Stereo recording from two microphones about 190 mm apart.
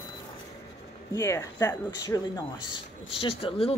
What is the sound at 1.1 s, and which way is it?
Speech, 15° left (ahead or behind).